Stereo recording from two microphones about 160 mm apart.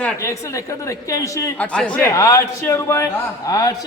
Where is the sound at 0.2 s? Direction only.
20° left (ahead or behind).